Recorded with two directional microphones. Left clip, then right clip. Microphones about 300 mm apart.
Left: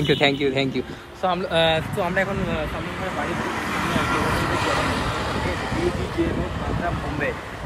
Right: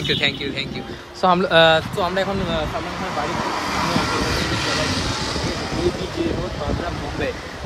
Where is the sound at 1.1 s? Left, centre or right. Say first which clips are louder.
Right 6 dB; right.